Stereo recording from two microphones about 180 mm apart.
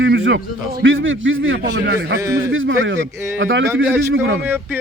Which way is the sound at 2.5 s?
90° right.